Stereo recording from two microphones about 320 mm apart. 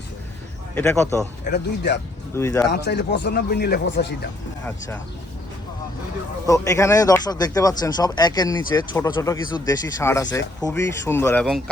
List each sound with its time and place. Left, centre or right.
0.8 s speech: centre
1.5 s speech: left
2.3 s speech: centre
2.6 s speech: left
6.5 s speech: centre